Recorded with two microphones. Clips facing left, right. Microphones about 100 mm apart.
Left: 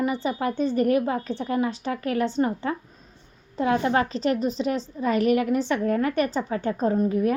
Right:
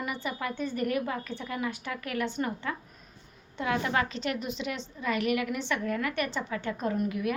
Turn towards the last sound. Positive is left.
turn(degrees=35)  # may be behind; listen again after turning